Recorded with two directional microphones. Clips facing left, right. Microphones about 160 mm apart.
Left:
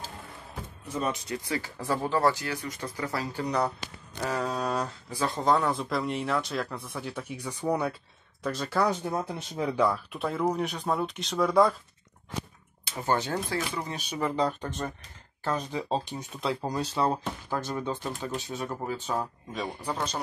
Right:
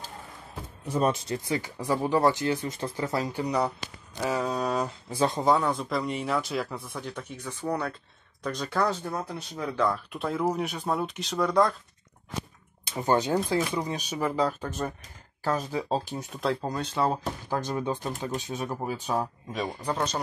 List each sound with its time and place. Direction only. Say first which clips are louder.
0.9 s speech: right 5 dB; 35° right (ahead or behind)
1.4 s speech: right 2 dB; 20° right (ahead or behind); by 4.9 s centre (ahead or behind)
5.1 s speech: right 5 dB; 25° right (ahead or behind)
5.4 s speech: left 2 dB; centre (ahead or behind); by 7.9 s 15° left (ahead or behind)
8.4 s speech: even; 5° left (ahead or behind)
8.9 s speech: left 2 dB; 20° left (ahead or behind)
9.8 s speech: even; centre (ahead or behind)
13.0 s speech: right 4 dB; 15° right (ahead or behind); by 17.2 s centre (ahead or behind)
17.5 s speech: right 2 dB; 15° right (ahead or behind)
19.5 s speech: right 3 dB; centre (ahead or behind)